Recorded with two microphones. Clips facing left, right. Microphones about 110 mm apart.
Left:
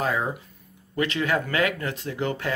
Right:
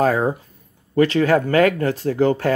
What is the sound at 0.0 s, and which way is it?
Speech, 40° right (ahead or behind).